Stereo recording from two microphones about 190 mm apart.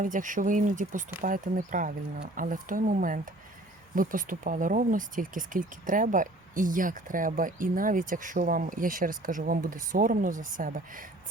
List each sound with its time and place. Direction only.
0.0 s speech: 45° right (ahead or behind)